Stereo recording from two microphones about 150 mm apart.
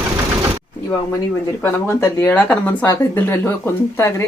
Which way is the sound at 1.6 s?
15° left (ahead or behind).